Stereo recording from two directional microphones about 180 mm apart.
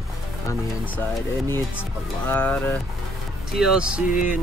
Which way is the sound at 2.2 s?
10° left (ahead or behind).